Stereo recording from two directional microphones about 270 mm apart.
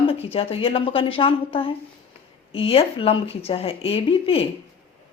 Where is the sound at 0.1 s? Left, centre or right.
Left.